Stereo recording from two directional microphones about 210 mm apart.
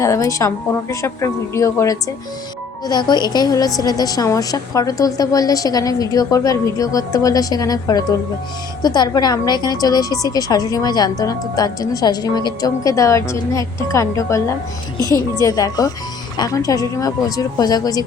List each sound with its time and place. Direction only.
0.0 s a woman's voice: 15° left (ahead or behind)